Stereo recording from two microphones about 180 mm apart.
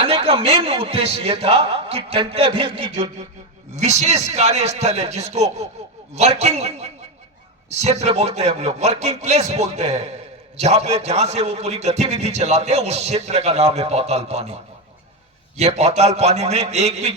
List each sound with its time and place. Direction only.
0.0 s a man's voice: 30° right (ahead or behind)
3.8 s a man's voice: 40° right (ahead or behind)
15.5 s a man's voice: 35° right (ahead or behind)